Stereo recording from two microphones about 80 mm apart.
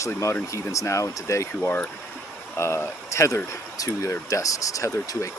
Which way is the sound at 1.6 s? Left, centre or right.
Left.